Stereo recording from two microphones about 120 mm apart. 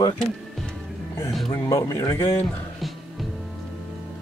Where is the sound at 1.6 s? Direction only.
25° left (ahead or behind).